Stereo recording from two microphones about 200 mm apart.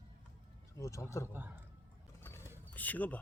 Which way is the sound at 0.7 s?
15° left (ahead or behind).